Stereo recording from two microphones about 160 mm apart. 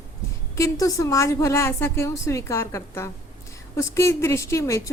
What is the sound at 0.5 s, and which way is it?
A woman's voice, 20° left (ahead or behind).